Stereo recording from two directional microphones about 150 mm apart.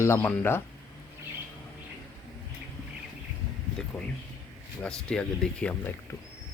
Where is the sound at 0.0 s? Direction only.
15° left (ahead or behind).